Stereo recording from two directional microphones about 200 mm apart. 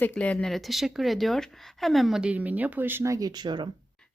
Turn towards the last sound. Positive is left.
turn(degrees=-20)  # may be behind; listen again after turning